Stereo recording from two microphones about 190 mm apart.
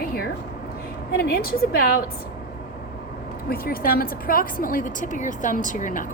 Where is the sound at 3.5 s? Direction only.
50° left (ahead or behind).